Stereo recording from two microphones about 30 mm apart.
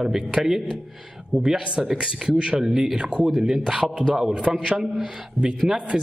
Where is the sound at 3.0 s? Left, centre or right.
Right.